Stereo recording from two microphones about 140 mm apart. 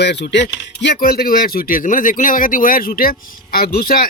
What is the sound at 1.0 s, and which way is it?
Speech, 90° left.